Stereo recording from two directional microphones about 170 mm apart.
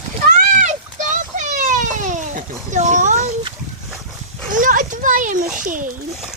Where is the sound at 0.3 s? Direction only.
45° right (ahead or behind).